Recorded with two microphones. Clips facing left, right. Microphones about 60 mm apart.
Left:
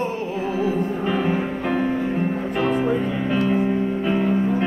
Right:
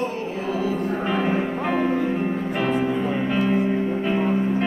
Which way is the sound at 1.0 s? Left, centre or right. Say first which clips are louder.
Right 1 dB; centre.